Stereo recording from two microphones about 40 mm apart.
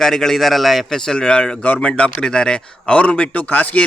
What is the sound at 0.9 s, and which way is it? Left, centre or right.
A man's voice, centre.